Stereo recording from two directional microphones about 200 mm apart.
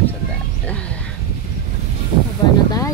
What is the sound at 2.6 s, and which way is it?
Music, 15° left (ahead or behind).